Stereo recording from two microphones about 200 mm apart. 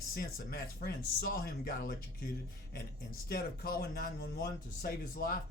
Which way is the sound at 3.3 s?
50° left (ahead or behind).